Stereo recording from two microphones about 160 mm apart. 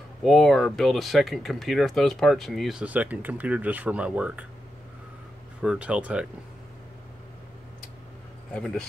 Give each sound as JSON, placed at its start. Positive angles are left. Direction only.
{"t": 0.2, "sound": "speech", "side_deg": 0}
{"t": 5.6, "sound": "speech", "side_deg": -5}
{"t": 8.5, "sound": "speech", "side_deg": 5}